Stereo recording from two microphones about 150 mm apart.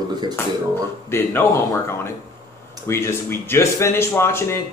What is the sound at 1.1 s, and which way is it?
Speech, 15° left (ahead or behind).